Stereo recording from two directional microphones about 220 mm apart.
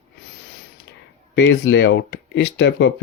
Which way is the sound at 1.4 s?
55° left (ahead or behind).